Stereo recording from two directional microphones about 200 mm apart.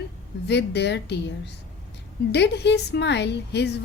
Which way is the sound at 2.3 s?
55° left (ahead or behind).